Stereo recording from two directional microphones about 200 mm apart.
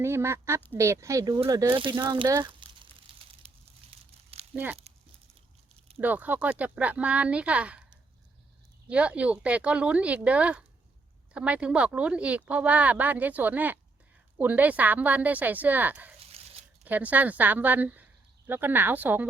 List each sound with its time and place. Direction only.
0.0 s speech: 10° right (ahead or behind)
3.1 s crushing: 25° right (ahead or behind)
3.4 s a sound: 30° right (ahead or behind)
4.5 s speech: 10° right (ahead or behind)
6.0 s speech: 10° right (ahead or behind)